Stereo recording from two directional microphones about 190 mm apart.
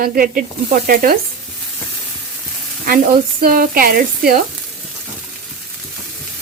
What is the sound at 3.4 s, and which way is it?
Speech, 50° right (ahead or behind).